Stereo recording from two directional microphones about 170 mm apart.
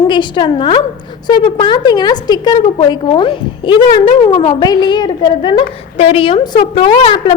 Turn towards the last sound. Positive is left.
turn(degrees=30)  # may be behind; listen again after turning